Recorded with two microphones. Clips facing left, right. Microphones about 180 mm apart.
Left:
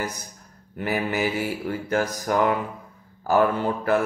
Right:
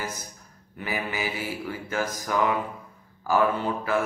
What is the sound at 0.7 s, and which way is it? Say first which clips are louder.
Mantra: left 6 dB; 55° left (ahead or behind).